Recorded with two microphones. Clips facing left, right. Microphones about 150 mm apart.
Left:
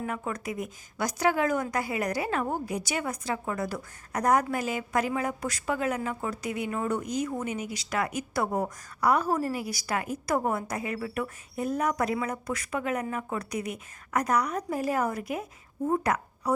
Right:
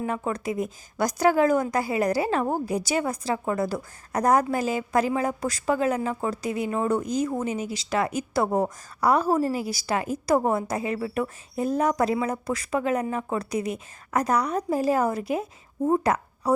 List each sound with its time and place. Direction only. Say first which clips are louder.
0.0 s a woman's voice: right 5 dB; 30° right (ahead or behind)